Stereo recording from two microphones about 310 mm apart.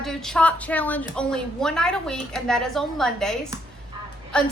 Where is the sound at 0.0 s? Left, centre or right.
Centre.